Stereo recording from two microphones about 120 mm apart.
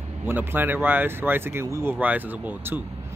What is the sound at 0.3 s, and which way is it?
Speech, 15° right (ahead or behind).